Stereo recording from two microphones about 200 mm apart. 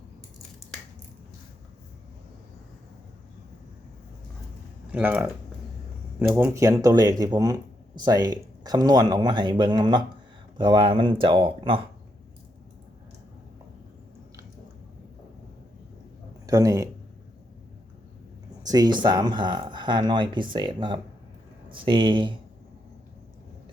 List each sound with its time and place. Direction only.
4.9 s speech: 5° right (ahead or behind); by 11.8 s 25° right (ahead or behind)
16.5 s speech: 15° right (ahead or behind)
18.7 s speech: 20° right (ahead or behind)